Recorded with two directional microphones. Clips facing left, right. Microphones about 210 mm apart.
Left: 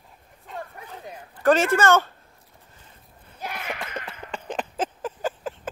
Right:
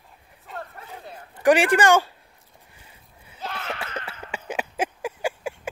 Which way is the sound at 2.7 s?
10° right (ahead or behind).